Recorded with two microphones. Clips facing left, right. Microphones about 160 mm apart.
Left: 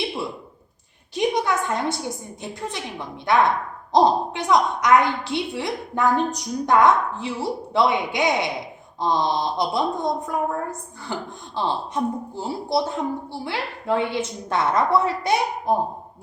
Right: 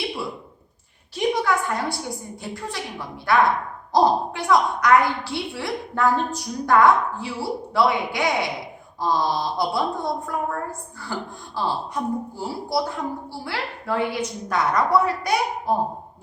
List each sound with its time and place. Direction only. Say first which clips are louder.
1.1 s a woman's voice: even; 20° left (ahead or behind)